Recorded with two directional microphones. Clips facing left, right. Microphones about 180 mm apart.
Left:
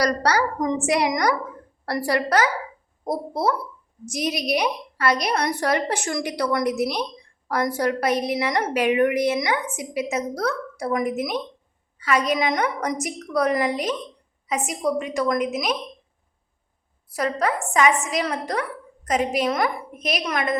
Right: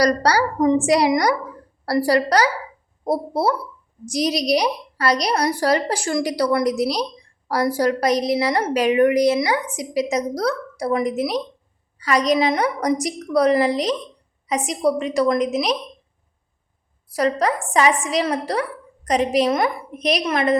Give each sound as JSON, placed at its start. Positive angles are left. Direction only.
{"t": 0.0, "sound": "a woman's voice", "side_deg": -35}
{"t": 17.2, "sound": "a woman's voice", "side_deg": -35}